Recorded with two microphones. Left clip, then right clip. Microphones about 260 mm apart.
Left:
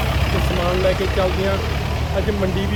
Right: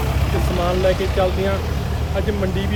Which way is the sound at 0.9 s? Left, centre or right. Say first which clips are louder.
Even; centre.